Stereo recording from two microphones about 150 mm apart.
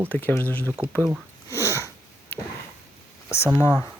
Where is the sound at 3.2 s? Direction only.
20° left (ahead or behind).